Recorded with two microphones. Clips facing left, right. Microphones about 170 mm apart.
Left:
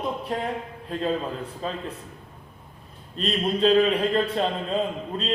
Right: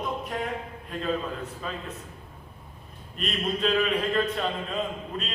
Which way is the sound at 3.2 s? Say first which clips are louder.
Left 5 dB; 30° left (ahead or behind).